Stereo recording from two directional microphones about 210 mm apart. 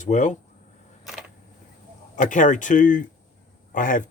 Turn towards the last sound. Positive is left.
turn(degrees=40)  # may be behind; listen again after turning